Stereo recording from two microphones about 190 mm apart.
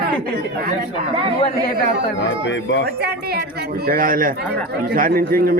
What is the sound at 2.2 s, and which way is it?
Speech, 75° left (ahead or behind).